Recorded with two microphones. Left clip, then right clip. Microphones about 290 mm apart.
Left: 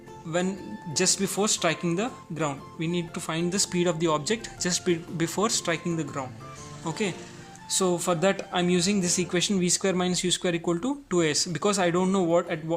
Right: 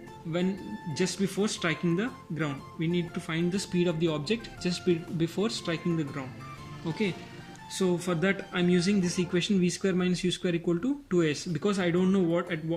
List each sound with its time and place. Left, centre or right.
0.9 s speech: centre
7.7 s speech: centre